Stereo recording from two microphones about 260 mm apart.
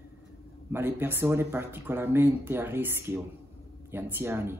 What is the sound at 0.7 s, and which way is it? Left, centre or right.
A man's voice, centre.